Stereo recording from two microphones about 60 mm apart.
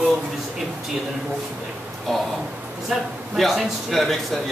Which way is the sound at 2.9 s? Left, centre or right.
Centre.